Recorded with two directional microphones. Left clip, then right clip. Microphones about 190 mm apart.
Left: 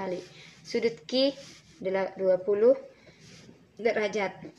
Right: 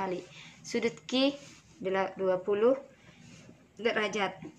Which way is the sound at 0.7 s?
20° right (ahead or behind).